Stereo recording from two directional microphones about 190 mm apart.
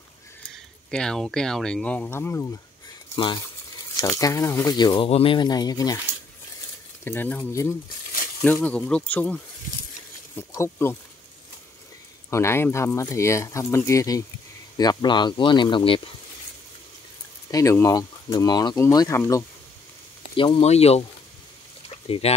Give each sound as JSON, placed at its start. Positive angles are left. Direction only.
{"t": 0.8, "sound": "speech", "side_deg": 5}
{"t": 3.2, "sound": "speech", "side_deg": 25}
{"t": 7.1, "sound": "speech", "side_deg": 10}
{"t": 12.3, "sound": "speech", "side_deg": 15}
{"t": 17.5, "sound": "speech", "side_deg": 15}
{"t": 20.3, "sound": "speech", "side_deg": 25}
{"t": 21.8, "sound": "a sound", "side_deg": 30}